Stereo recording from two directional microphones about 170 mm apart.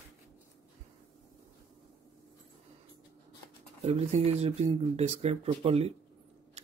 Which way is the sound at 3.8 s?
40° right (ahead or behind).